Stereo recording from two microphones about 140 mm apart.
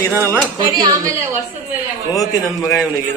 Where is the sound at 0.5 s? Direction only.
30° right (ahead or behind).